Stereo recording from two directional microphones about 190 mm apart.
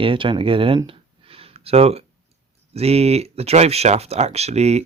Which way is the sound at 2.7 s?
35° right (ahead or behind).